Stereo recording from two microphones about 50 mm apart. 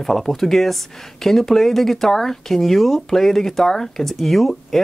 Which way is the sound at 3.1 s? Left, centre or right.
Centre.